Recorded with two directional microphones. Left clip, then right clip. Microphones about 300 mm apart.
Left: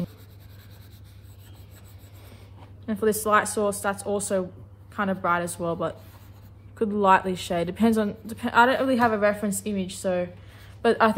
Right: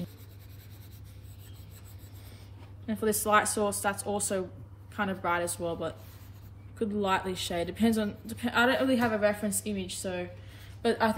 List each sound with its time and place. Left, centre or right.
2.9 s a woman's voice: centre